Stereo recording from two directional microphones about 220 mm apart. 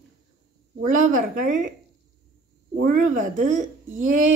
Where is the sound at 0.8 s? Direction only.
35° right (ahead or behind).